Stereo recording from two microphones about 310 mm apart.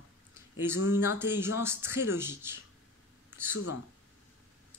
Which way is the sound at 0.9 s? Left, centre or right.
Centre.